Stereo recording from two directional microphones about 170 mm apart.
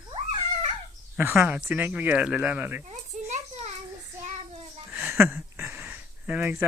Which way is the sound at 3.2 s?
40° right (ahead or behind).